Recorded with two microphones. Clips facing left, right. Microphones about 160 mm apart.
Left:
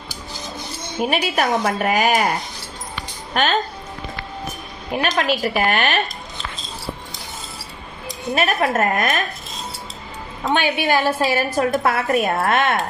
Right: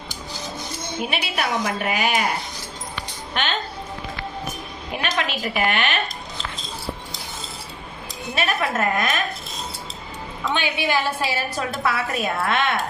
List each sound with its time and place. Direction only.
1.0 s a woman's voice: 45° left (ahead or behind)
3.3 s speech: 40° left (ahead or behind)
5.0 s a woman's voice: 45° left (ahead or behind)
8.4 s a woman's voice: 45° left (ahead or behind)
10.4 s a woman's voice: 50° left (ahead or behind)